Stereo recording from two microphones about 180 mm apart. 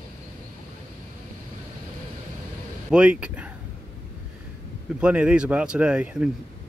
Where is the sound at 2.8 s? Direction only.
5° right (ahead or behind).